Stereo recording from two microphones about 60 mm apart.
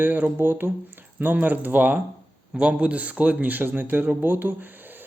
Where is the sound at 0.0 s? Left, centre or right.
Right.